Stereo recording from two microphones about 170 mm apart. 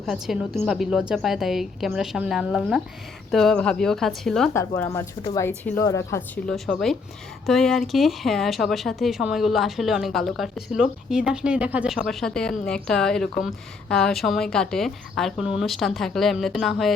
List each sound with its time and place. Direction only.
0.0 s speech: centre (ahead or behind)
4.5 s a woman's voice: 15° left (ahead or behind)
6.5 s speech: centre (ahead or behind)